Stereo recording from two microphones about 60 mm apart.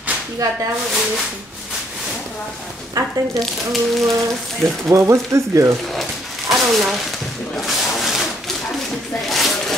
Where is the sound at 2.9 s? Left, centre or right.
Right.